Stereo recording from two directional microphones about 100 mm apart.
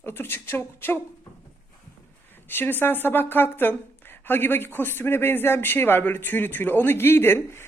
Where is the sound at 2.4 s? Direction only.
20° left (ahead or behind).